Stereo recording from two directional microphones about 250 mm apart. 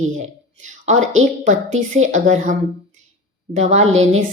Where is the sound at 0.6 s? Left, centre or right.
Right.